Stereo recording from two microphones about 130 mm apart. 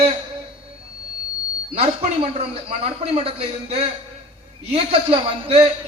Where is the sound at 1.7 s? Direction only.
50° right (ahead or behind).